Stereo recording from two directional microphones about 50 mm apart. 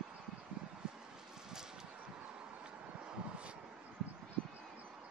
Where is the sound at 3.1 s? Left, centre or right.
Right.